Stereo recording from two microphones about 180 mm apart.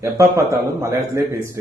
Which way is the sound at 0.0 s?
15° right (ahead or behind).